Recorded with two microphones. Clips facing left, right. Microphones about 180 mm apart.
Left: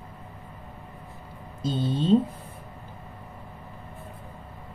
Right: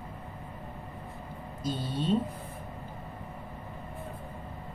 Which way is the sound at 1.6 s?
25° left (ahead or behind).